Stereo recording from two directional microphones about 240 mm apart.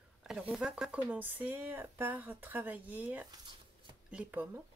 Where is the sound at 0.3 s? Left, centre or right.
Centre.